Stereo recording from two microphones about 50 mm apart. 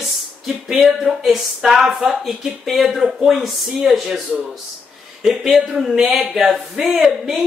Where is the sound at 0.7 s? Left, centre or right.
Centre.